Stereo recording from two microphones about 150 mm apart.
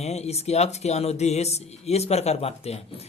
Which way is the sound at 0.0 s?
45° left (ahead or behind).